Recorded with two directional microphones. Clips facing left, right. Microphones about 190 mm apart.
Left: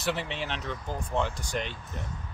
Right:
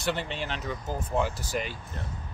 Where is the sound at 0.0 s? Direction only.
Centre (ahead or behind).